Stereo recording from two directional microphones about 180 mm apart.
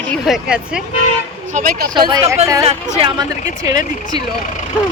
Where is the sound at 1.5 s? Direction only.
50° right (ahead or behind).